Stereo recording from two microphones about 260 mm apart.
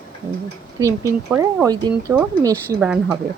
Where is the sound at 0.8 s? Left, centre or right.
Centre.